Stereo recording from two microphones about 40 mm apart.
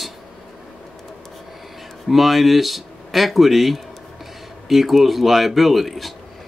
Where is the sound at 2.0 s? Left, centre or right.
Centre.